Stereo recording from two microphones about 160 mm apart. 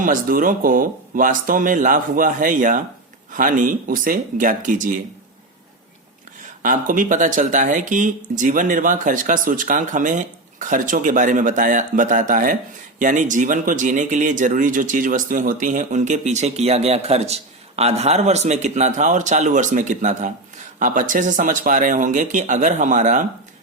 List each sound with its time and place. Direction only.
0.0 s speech: 60° right (ahead or behind)
6.6 s speech: 55° right (ahead or behind)